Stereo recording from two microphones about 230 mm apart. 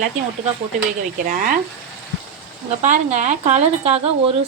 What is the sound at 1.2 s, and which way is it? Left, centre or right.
Speech, right.